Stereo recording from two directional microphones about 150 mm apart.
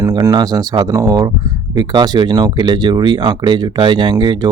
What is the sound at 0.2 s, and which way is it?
Speech, 25° right (ahead or behind).